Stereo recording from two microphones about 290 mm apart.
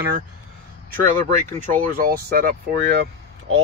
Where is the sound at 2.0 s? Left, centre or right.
Right.